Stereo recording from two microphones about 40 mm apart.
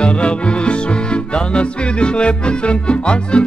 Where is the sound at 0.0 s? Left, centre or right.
Left.